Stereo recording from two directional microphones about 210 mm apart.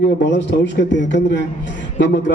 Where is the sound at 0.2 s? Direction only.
55° left (ahead or behind).